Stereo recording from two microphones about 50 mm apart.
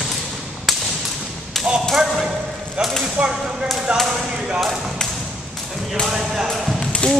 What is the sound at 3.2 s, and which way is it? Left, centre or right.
Speech, right.